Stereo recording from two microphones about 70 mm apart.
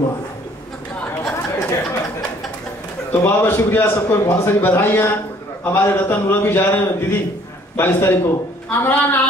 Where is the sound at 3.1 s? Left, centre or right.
Left.